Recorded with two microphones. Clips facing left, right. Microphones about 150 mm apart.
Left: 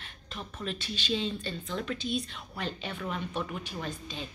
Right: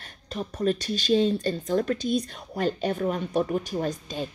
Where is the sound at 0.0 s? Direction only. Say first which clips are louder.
Right 9 dB; 40° right (ahead or behind).